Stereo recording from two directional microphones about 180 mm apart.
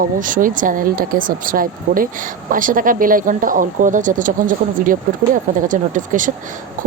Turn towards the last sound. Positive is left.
turn(degrees=-45)  # may be behind; listen again after turning